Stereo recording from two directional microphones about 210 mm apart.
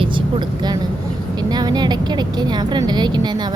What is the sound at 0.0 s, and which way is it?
Vehicle, 25° right (ahead or behind).